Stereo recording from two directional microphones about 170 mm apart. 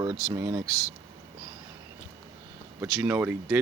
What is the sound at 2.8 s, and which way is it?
Speech, 10° right (ahead or behind).